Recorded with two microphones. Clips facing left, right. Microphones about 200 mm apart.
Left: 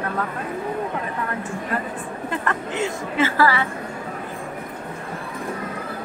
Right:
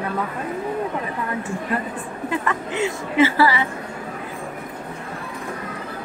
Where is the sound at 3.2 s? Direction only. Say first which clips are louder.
Right 3 dB; 15° right (ahead or behind).